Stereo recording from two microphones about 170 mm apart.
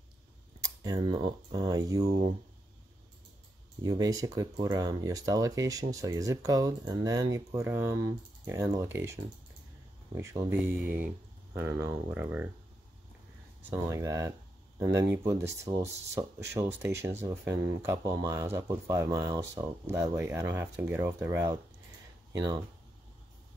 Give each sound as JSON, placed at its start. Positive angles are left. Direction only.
{"t": 0.6, "sound": "a sound", "side_deg": -20}
{"t": 1.5, "sound": "speech", "side_deg": -25}
{"t": 3.8, "sound": "speech", "side_deg": -20}
{"t": 11.5, "sound": "speech", "side_deg": -15}
{"t": 13.6, "sound": "speech", "side_deg": -15}